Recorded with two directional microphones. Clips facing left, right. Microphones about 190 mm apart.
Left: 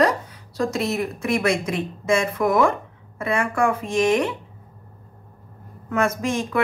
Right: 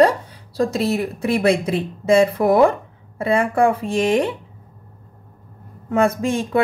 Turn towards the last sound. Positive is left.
turn(degrees=-30)  # may be behind; listen again after turning